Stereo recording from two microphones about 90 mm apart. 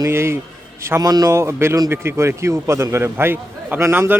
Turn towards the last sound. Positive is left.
turn(degrees=-25)  # may be behind; listen again after turning